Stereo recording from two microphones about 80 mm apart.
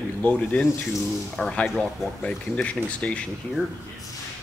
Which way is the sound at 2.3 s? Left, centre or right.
Centre.